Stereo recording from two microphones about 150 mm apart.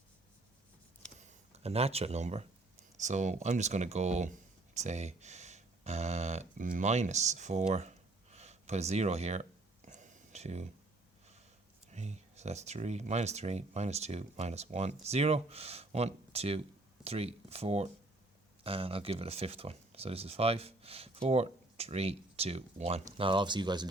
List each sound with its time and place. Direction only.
1.2 s speech: 45° right (ahead or behind)
11.9 s speech: 50° right (ahead or behind); by 23.9 s 30° right (ahead or behind)